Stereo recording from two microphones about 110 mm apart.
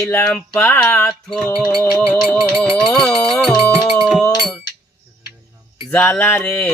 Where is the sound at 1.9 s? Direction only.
10° left (ahead or behind).